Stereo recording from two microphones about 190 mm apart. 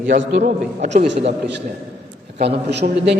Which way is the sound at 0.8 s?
35° right (ahead or behind).